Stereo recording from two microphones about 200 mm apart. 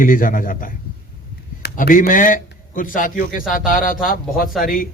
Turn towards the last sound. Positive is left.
turn(degrees=45)  # may be behind; listen again after turning